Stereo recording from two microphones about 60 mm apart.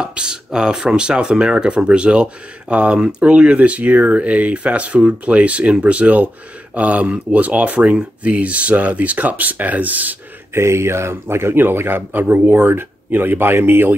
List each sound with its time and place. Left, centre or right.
0.0 s speech: centre
10.5 s speech: right